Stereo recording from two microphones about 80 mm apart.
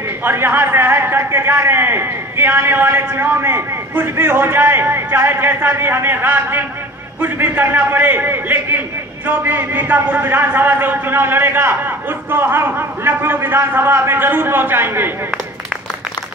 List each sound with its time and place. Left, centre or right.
0.2 s a man's voice: right